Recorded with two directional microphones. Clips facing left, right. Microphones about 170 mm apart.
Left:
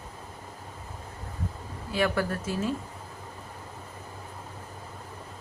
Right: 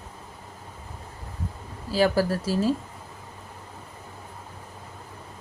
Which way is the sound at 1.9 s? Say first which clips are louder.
Right 5 dB; 30° right (ahead or behind).